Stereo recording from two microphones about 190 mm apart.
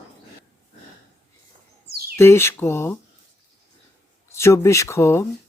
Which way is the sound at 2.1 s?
15° left (ahead or behind).